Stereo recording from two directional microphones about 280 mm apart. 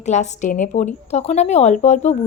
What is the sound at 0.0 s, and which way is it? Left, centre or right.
A woman's voice, left.